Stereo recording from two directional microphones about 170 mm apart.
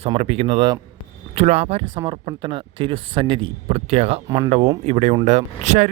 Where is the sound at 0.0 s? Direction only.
35° right (ahead or behind).